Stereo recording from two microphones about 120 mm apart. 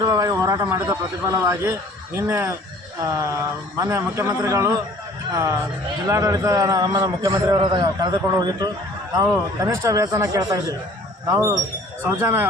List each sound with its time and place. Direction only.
0.0 s a man's voice: 30° right (ahead or behind)
7.5 s a man's voice: 40° right (ahead or behind)
9.6 s a man's voice: 25° right (ahead or behind)